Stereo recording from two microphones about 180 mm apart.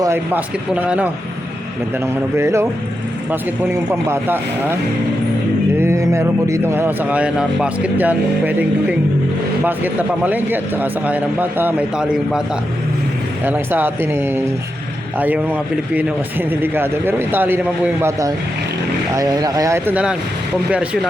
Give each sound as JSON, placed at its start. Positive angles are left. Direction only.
{"t": 0.0, "sound": "a man's voice", "side_deg": -10}
{"t": 2.3, "sound": "a man's voice", "side_deg": -15}
{"t": 5.8, "sound": "a man's voice", "side_deg": -15}
{"t": 13.4, "sound": "a man's voice", "side_deg": -10}